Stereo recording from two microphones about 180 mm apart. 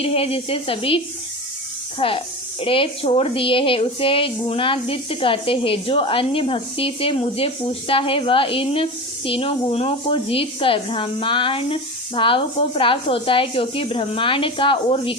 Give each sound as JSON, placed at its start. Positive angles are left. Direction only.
{"t": 0.0, "sound": "a woman's voice", "side_deg": 35}